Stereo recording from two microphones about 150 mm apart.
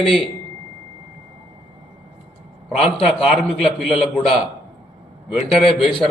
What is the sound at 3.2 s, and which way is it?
A man's voice, 5° right (ahead or behind).